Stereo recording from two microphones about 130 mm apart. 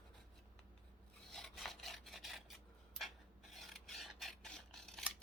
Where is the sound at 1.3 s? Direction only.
Centre (ahead or behind).